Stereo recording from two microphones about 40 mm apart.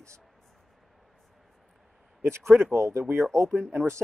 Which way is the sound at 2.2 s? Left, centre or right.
Right.